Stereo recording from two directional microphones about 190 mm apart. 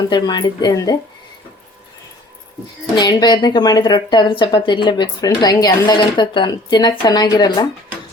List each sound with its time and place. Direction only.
0.1 s speech: 20° left (ahead or behind)
2.9 s speech: 20° left (ahead or behind)